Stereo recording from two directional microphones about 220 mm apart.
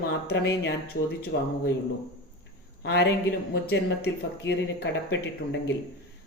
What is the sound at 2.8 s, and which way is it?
A woman's voice, 50° left (ahead or behind).